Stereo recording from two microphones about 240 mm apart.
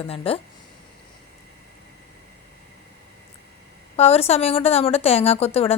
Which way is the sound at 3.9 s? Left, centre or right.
Left.